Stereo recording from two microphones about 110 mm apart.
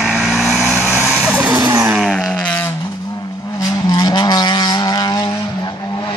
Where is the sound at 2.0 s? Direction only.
Centre (ahead or behind).